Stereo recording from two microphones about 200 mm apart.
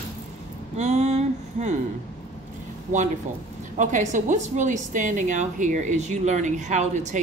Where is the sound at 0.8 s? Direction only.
35° right (ahead or behind).